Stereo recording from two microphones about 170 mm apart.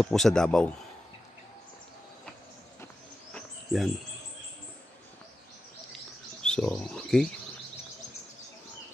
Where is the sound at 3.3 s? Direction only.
Centre (ahead or behind).